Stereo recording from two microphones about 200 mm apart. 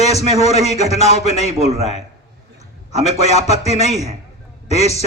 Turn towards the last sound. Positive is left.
turn(degrees=30)  # may be behind; listen again after turning